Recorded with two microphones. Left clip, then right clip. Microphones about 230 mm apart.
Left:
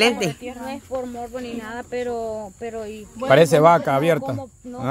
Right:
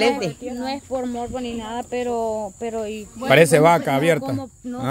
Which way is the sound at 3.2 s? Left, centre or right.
Centre.